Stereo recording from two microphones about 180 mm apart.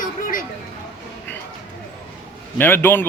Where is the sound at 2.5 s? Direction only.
10° left (ahead or behind).